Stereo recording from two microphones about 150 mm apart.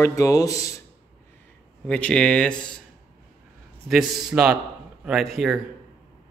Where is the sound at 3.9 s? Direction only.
5° right (ahead or behind).